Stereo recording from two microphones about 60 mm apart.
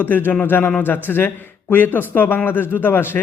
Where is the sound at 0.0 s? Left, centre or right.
Left.